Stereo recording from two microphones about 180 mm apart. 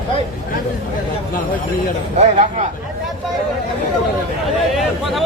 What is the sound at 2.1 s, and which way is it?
Speech, 40° right (ahead or behind).